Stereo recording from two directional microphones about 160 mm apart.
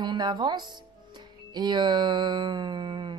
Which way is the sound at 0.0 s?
25° right (ahead or behind).